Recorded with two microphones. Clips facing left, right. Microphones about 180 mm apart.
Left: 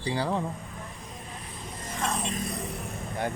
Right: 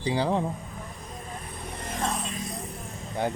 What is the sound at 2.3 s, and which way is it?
Music, 60° left (ahead or behind).